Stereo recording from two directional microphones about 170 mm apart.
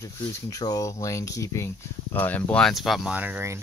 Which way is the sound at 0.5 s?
20° left (ahead or behind).